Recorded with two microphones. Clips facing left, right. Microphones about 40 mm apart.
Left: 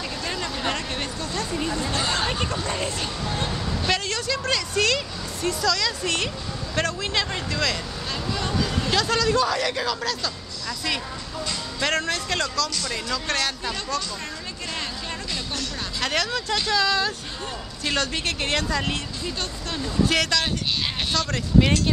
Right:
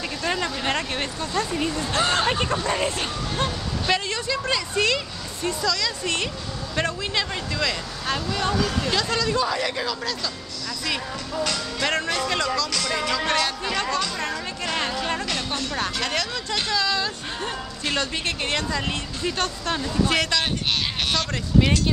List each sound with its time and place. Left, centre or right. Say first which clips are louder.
0.2 s a sound: right 4 dB; right
1.9 s speech: right 6 dB; right
3.4 s vehicle: even; centre
4.1 s speech: even; centre
8.3 s speech: right 2 dB; right
8.9 s speech: left 4 dB; centre
11.8 s speech: even; centre
16.0 s speech: left 1 dB; centre
19.2 s speech: right 8 dB; right
19.8 s speech: left 1 dB; centre
21.3 s speech: left 3 dB; centre